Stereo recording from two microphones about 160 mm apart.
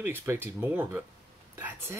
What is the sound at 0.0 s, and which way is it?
Speech, 15° right (ahead or behind).